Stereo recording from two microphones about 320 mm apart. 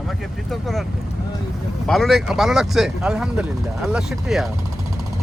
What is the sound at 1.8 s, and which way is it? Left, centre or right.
Speech, centre.